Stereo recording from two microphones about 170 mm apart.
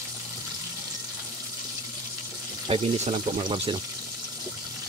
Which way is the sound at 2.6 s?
35° right (ahead or behind).